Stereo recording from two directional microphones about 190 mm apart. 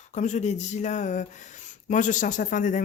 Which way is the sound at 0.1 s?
40° left (ahead or behind).